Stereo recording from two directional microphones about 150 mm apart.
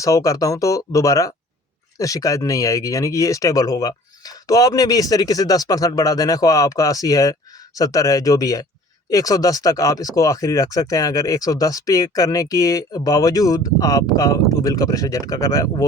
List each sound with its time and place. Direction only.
0.0 s speech: 20° left (ahead or behind)